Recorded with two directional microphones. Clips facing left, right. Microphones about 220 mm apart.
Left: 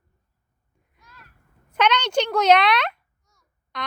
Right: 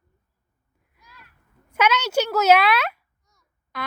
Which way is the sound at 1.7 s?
5° right (ahead or behind).